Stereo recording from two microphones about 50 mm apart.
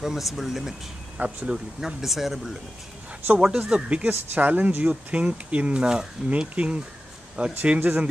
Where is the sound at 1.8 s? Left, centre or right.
Centre.